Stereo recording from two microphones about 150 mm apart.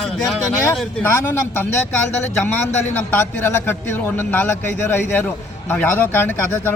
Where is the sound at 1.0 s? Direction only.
15° left (ahead or behind).